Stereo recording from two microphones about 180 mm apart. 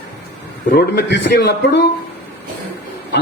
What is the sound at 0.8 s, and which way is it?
A man's voice, 70° left (ahead or behind).